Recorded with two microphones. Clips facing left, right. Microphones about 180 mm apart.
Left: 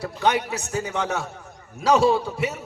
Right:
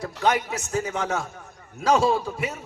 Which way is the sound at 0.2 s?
70° left (ahead or behind).